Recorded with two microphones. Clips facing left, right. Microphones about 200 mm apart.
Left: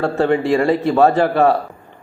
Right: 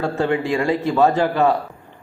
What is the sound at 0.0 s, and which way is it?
Speech, 60° left (ahead or behind).